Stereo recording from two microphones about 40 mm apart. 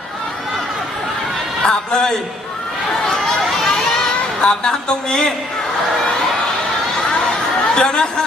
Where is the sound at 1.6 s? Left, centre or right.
Centre.